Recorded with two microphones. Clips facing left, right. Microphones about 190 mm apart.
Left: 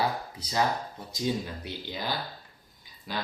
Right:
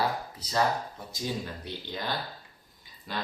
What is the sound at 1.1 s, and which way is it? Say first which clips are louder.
Speech: left 4 dB; 20° left (ahead or behind).